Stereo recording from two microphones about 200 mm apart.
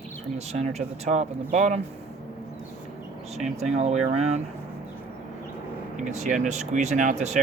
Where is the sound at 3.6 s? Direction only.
35° right (ahead or behind).